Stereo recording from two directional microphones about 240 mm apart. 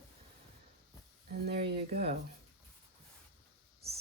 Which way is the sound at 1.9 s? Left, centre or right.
Right.